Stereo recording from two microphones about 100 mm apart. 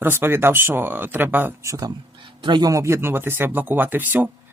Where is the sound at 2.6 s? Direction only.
30° right (ahead or behind).